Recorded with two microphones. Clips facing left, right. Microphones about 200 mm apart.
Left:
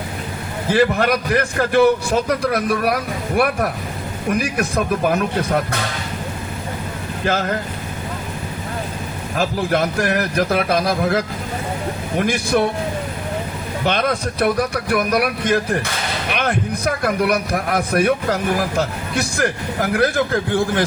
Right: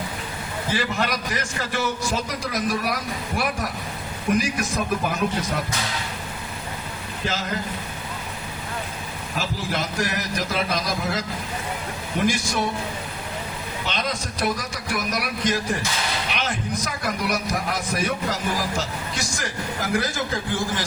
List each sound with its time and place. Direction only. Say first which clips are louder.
0.7 s a man's voice: left 10 dB; 55° left (ahead or behind)
7.3 s a man's voice: left 8 dB; 60° left (ahead or behind)
9.4 s a man's voice: left 9 dB; 55° left (ahead or behind)
13.8 s a man's voice: left 9 dB; 60° left (ahead or behind)